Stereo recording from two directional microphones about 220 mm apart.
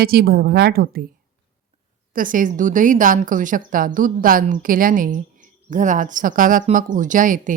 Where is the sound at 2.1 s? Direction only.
35° right (ahead or behind).